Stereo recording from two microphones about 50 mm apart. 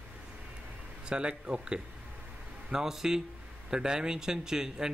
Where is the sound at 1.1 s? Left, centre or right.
Centre.